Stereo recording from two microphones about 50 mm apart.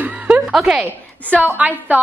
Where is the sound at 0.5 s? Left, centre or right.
Centre.